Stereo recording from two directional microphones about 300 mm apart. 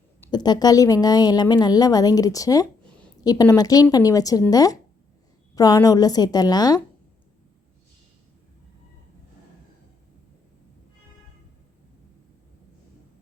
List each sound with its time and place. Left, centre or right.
0.2 s a woman's voice: centre